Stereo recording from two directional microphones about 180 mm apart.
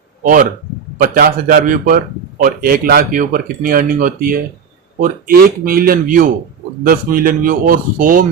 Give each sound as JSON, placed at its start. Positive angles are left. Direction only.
{"t": 0.2, "sound": "a man's voice", "side_deg": -50}